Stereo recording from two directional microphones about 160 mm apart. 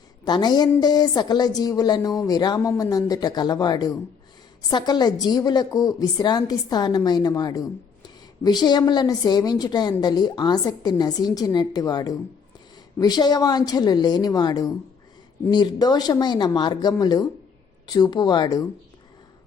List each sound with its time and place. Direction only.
0.3 s a woman's voice: 25° left (ahead or behind)